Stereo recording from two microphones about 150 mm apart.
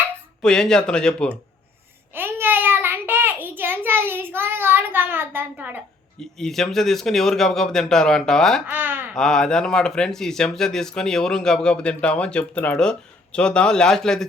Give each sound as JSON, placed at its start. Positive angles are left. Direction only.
{"t": 0.4, "sound": "speech", "side_deg": 5}
{"t": 2.1, "sound": "child singing", "side_deg": -15}
{"t": 6.1, "sound": "speech", "side_deg": 5}
{"t": 8.6, "sound": "a sound", "side_deg": -15}
{"t": 9.1, "sound": "speech", "side_deg": 5}